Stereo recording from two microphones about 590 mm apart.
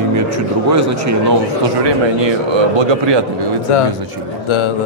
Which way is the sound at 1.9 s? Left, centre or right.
Right.